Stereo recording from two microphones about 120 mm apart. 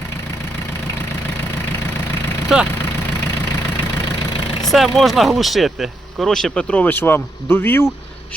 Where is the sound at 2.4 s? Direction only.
5° right (ahead or behind).